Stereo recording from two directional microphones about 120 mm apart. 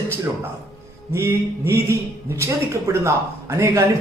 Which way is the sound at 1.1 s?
20° right (ahead or behind).